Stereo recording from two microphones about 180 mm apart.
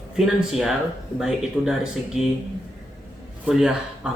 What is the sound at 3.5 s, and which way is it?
Speech, 5° right (ahead or behind).